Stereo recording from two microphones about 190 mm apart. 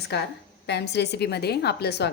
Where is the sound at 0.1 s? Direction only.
60° left (ahead or behind).